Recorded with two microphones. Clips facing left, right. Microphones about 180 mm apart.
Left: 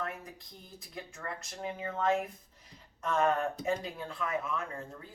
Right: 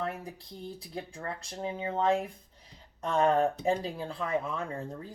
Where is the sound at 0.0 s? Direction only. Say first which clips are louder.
Right 4 dB; 35° right (ahead or behind).